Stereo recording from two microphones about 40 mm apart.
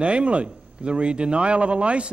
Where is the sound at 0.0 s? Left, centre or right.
Right.